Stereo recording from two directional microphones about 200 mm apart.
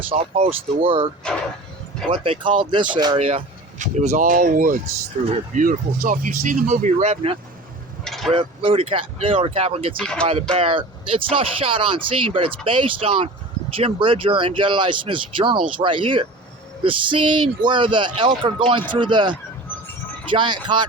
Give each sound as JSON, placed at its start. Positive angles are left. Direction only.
{"t": 0.1, "sound": "speech", "side_deg": -30}
{"t": 8.0, "sound": "a sound", "side_deg": 0}
{"t": 8.3, "sound": "speech", "side_deg": -25}
{"t": 10.0, "sound": "speech", "side_deg": 5}
{"t": 10.6, "sound": "speech", "side_deg": -25}